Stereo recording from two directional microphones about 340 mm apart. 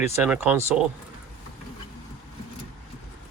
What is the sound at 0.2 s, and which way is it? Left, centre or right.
Speech, centre.